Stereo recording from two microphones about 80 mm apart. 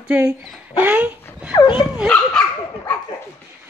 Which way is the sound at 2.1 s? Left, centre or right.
Centre.